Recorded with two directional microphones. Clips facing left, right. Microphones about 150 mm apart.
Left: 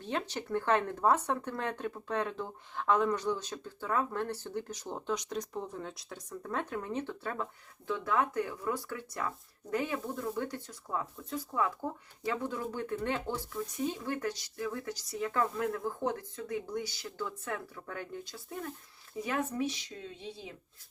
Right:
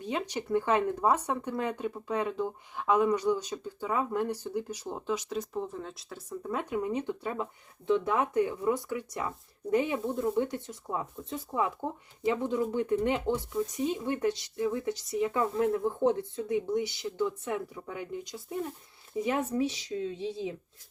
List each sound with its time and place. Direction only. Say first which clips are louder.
0.0 s speech: right 3 dB; 10° right (ahead or behind)